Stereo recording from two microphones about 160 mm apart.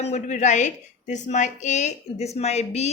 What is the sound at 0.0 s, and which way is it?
A woman's voice, 45° left (ahead or behind).